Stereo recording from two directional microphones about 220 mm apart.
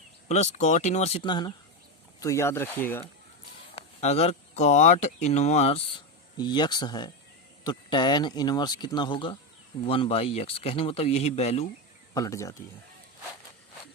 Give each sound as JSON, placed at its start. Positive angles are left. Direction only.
{"t": 0.3, "sound": "speech", "side_deg": 30}
{"t": 3.8, "sound": "speech", "side_deg": 30}
{"t": 12.1, "sound": "speech", "side_deg": 15}